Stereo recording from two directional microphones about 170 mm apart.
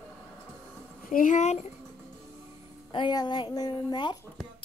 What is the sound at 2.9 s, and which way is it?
Speech, 25° left (ahead or behind).